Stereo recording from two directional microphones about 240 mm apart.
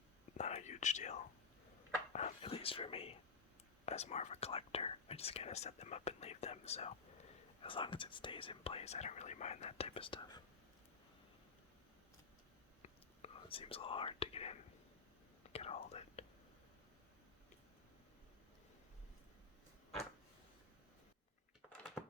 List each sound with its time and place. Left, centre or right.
0.3 s whispering: left
2.1 s speech: left
13.2 s speech: left
15.5 s whispering: left